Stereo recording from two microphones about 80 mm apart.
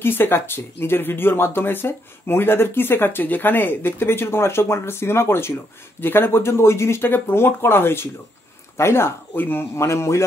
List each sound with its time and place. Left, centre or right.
0.0 s speech: left